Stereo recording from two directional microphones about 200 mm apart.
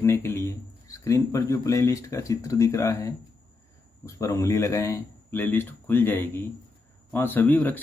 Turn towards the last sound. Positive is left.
turn(degrees=10)  # may be behind; listen again after turning